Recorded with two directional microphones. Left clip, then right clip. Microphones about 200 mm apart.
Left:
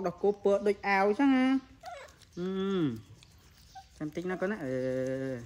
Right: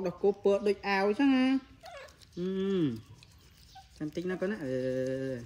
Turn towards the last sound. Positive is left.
turn(degrees=15)  # may be behind; listen again after turning